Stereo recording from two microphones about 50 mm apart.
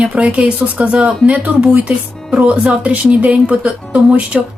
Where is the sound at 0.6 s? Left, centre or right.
Right.